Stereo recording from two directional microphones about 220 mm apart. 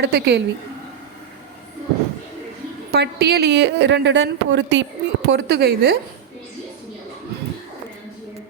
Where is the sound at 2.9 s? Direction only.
50° right (ahead or behind).